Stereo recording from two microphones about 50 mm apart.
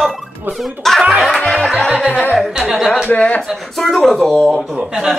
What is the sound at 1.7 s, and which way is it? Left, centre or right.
Music, centre.